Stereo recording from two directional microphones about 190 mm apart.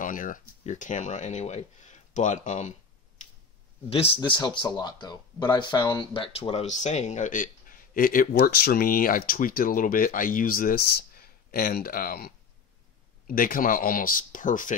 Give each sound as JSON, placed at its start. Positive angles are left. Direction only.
{"t": 0.0, "sound": "speech", "side_deg": 45}
{"t": 3.9, "sound": "speech", "side_deg": 30}